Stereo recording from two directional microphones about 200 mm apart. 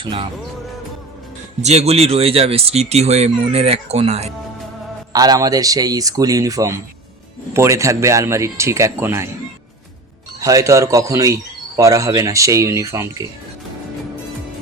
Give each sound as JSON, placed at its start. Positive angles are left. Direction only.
{"t": 0.0, "sound": "music", "side_deg": -30}
{"t": 1.6, "sound": "speech", "side_deg": -30}
{"t": 5.1, "sound": "speech", "side_deg": -20}
{"t": 10.4, "sound": "speech", "side_deg": -15}